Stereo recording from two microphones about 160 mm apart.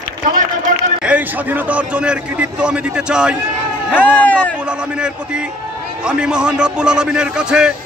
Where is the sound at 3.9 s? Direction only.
10° left (ahead or behind).